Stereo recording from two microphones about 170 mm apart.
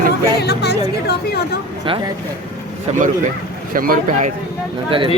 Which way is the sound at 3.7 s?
55° right (ahead or behind).